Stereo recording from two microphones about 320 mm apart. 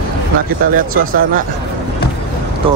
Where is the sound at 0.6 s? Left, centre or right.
Right.